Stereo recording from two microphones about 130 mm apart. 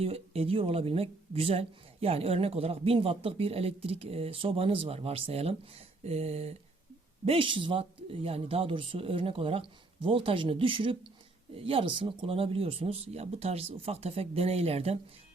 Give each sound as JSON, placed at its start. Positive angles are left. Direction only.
{"t": 0.0, "sound": "a woman's voice", "side_deg": -50}
{"t": 6.0, "sound": "a sound", "side_deg": -55}
{"t": 7.3, "sound": "a woman's voice", "side_deg": -40}